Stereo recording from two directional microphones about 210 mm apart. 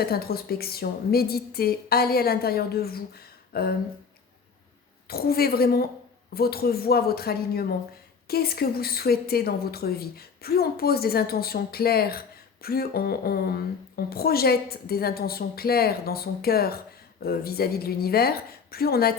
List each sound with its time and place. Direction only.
0.0 s speech: 45° left (ahead or behind)
5.0 s speech: 45° left (ahead or behind)